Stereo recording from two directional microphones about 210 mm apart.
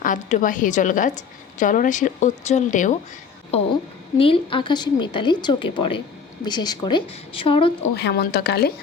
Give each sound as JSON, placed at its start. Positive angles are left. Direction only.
{"t": 0.0, "sound": "a woman's voice", "side_deg": 40}
{"t": 4.2, "sound": "a woman's voice", "side_deg": 25}
{"t": 7.8, "sound": "a woman's voice", "side_deg": 55}